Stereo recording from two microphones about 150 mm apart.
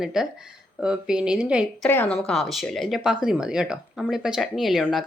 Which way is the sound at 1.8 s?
10° left (ahead or behind).